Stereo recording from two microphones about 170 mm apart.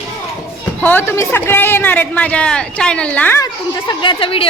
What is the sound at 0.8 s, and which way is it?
A man's voice, 10° left (ahead or behind).